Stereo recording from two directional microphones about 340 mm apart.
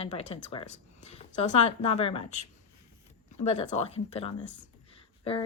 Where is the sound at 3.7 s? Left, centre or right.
Centre.